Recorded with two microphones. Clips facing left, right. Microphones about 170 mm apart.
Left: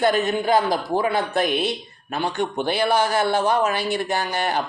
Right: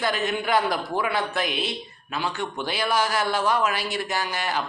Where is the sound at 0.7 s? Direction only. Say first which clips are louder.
Left 4 dB; 35° left (ahead or behind).